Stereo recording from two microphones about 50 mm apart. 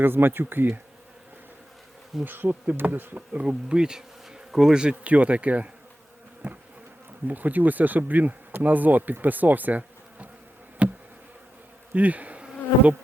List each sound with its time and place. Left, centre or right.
0.0 s speech: right
2.2 s speech: right
3.4 s bee: centre
7.3 s speech: right
10.8 s insect: right
11.9 s bee: right